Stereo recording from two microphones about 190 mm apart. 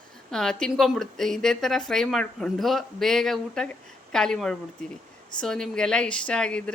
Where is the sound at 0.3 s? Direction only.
5° left (ahead or behind).